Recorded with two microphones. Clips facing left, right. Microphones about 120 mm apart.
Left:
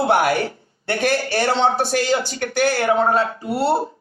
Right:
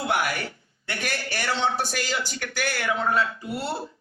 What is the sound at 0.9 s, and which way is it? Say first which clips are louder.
A man's voice: left 11 dB; 35° left (ahead or behind).